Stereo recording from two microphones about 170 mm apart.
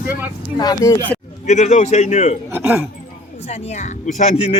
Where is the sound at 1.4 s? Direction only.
45° left (ahead or behind).